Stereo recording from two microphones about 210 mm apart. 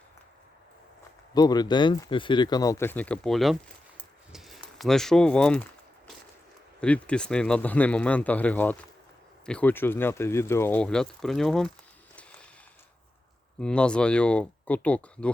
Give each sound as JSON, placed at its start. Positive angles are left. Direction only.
{"t": 1.3, "sound": "speech", "side_deg": 20}
{"t": 4.3, "sound": "a sound", "side_deg": 0}
{"t": 6.7, "sound": "a man's voice", "side_deg": 5}
{"t": 13.6, "sound": "a man's voice", "side_deg": 5}